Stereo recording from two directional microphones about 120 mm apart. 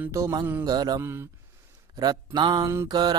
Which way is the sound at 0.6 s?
35° right (ahead or behind).